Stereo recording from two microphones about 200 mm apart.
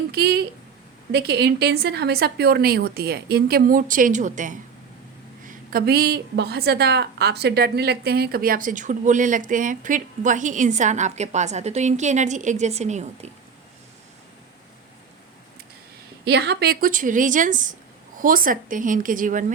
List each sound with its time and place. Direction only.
0.1 s a sound: 50° right (ahead or behind)
1.1 s a woman's voice: 55° right (ahead or behind); by 4.5 s 40° right (ahead or behind)
5.5 s a woman's voice: 50° right (ahead or behind); by 13.3 s 35° right (ahead or behind)
16.2 s a woman's voice: 55° right (ahead or behind)